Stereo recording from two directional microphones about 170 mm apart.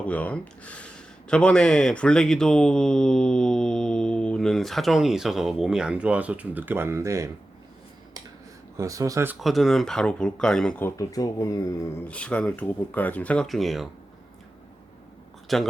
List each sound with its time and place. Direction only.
0.0 s speech: 10° left (ahead or behind); by 7.3 s 15° right (ahead or behind)
8.8 s speech: 20° right (ahead or behind)
9.4 s speech: centre (ahead or behind)
15.5 s speech: centre (ahead or behind)